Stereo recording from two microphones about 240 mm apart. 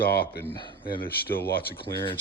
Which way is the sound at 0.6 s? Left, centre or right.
Centre.